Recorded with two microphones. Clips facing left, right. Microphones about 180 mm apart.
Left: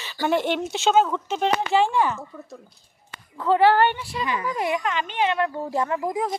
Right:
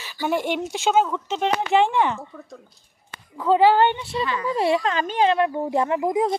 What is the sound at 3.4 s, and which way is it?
Speech, 15° right (ahead or behind).